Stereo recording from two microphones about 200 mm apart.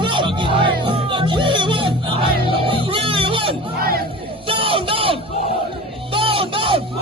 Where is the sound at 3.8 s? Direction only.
50° right (ahead or behind).